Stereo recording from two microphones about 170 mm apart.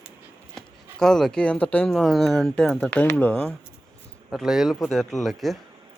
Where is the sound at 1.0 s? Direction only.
5° left (ahead or behind).